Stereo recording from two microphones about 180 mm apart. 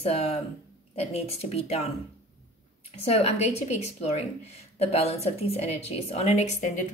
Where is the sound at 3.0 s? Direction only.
35° left (ahead or behind).